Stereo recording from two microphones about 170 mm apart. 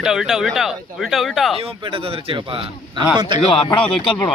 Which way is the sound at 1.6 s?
35° right (ahead or behind).